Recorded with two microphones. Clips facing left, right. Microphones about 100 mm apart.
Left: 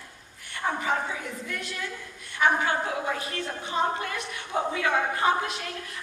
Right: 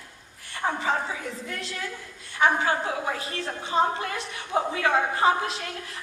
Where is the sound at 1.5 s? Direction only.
30° right (ahead or behind).